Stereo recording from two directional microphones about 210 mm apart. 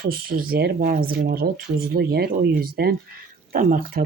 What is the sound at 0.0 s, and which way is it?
Speech, 45° right (ahead or behind).